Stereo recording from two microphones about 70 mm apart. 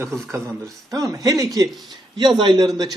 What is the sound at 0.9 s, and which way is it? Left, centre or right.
Speech, right.